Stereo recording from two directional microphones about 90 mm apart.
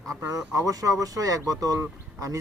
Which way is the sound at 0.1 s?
35° right (ahead or behind).